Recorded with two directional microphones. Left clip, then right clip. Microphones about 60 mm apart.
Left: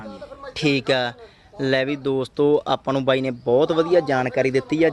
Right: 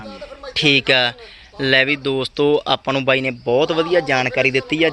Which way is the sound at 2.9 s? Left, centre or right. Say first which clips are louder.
Right 3 dB; left.